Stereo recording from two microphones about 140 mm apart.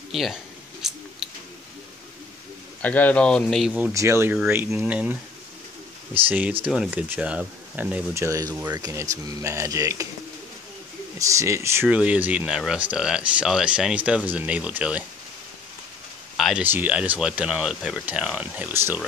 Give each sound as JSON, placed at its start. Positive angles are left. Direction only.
{"t": 0.1, "sound": "speech", "side_deg": 0}
{"t": 0.8, "sound": "scissors", "side_deg": -5}
{"t": 2.8, "sound": "speech", "side_deg": 10}
{"t": 3.9, "sound": "speech", "side_deg": -20}
{"t": 6.6, "sound": "speech", "side_deg": -5}
{"t": 8.1, "sound": "speech", "side_deg": -20}
{"t": 11.1, "sound": "speech", "side_deg": -20}
{"t": 16.3, "sound": "a sound", "side_deg": 0}
{"t": 16.6, "sound": "speech", "side_deg": -15}